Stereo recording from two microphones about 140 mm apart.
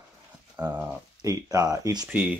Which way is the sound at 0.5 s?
10° right (ahead or behind).